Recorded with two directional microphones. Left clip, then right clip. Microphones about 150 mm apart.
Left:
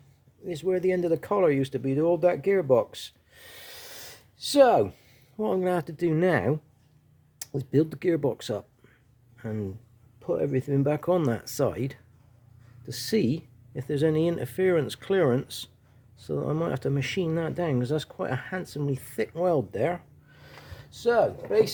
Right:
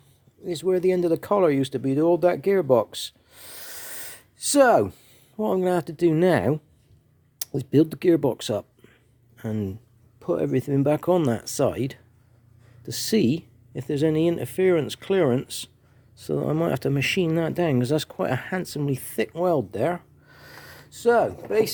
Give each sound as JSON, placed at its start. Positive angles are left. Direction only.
{"t": 0.4, "sound": "speech", "side_deg": -30}
{"t": 5.4, "sound": "speech", "side_deg": -20}
{"t": 9.4, "sound": "speech", "side_deg": -35}
{"t": 10.2, "sound": "speech", "side_deg": -45}
{"t": 20.3, "sound": "a sound", "side_deg": -55}